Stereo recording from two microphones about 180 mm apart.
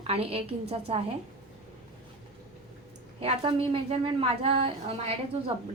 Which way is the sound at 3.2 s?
30° right (ahead or behind).